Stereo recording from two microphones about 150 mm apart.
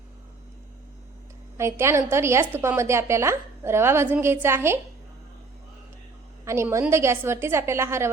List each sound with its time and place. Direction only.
1.5 s a woman's voice: 20° right (ahead or behind)
6.4 s a woman's voice: 20° right (ahead or behind)